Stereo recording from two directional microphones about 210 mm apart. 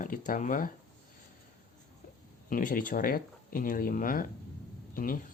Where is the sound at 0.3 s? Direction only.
40° left (ahead or behind).